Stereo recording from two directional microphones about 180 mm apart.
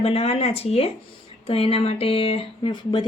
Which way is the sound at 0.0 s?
35° left (ahead or behind).